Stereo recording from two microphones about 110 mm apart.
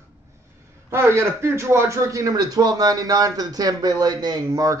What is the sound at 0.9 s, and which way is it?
A man's voice, 25° right (ahead or behind).